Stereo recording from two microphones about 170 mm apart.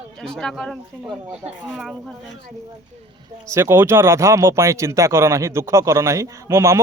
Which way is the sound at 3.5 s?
15° right (ahead or behind).